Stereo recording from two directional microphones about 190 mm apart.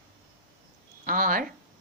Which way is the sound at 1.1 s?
45° right (ahead or behind).